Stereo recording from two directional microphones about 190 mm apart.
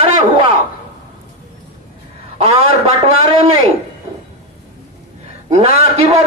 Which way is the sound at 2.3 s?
30° right (ahead or behind).